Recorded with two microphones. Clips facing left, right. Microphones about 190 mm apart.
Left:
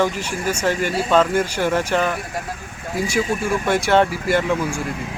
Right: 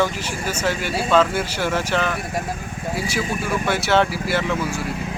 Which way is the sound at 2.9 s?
5° right (ahead or behind).